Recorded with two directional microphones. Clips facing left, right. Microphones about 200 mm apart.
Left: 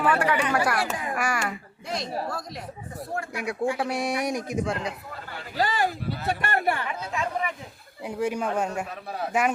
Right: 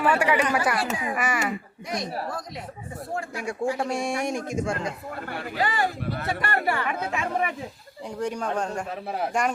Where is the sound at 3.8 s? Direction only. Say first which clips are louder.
Even; 5° left (ahead or behind).